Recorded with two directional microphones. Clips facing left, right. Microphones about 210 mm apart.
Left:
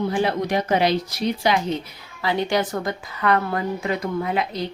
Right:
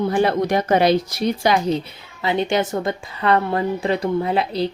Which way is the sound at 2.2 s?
25° right (ahead or behind).